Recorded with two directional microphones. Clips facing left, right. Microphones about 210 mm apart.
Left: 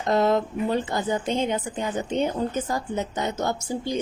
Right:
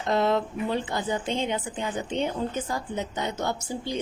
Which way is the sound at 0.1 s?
45° left (ahead or behind).